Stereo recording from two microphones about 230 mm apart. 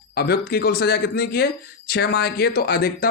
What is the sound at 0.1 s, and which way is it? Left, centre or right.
A man's voice, left.